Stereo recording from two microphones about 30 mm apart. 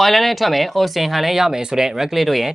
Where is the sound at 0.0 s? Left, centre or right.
Centre.